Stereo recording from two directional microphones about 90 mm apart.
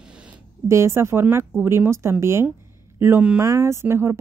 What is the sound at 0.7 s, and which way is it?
A woman's voice, 30° right (ahead or behind).